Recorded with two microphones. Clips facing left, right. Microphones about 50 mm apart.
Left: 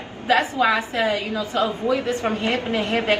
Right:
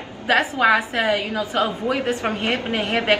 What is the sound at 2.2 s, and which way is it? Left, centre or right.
Speech, right.